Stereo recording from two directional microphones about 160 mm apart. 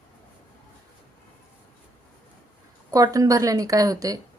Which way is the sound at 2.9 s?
20° right (ahead or behind).